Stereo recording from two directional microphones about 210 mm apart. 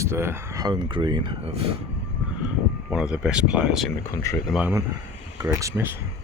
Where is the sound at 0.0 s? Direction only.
10° right (ahead or behind).